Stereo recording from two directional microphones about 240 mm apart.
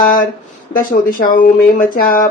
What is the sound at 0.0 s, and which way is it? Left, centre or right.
Speech, left.